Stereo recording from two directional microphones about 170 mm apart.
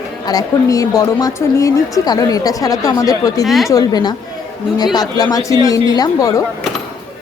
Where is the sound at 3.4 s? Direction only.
Centre (ahead or behind).